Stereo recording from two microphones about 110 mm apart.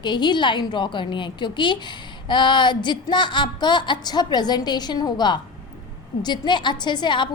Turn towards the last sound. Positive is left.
turn(degrees=45)  # may be behind; listen again after turning